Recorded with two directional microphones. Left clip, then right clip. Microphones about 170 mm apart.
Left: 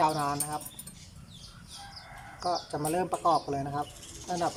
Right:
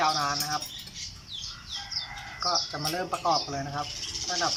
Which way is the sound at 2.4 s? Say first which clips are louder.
Right 2 dB; 20° left (ahead or behind).